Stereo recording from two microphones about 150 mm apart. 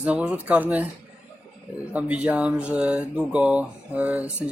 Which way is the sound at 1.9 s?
10° right (ahead or behind).